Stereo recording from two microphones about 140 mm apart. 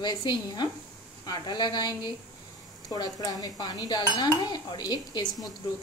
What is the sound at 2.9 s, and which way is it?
Dishes, 30° left (ahead or behind).